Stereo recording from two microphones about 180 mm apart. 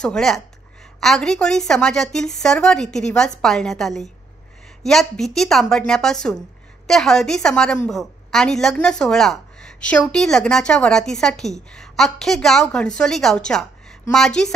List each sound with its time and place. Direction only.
0.0 s a woman's voice: 5° left (ahead or behind)